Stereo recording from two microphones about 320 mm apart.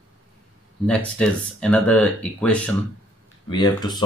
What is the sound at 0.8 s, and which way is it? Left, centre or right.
Speech, centre.